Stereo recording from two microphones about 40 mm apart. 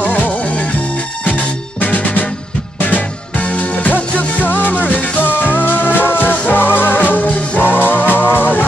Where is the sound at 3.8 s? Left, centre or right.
Left.